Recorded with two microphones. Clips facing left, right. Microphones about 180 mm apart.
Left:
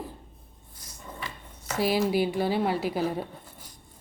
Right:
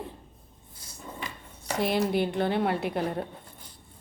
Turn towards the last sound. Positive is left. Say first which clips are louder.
# left 1 dB
turn(degrees=5)  # may be behind; listen again after turning